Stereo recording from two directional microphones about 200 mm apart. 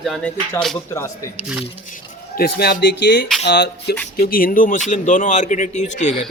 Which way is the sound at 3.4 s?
55° left (ahead or behind).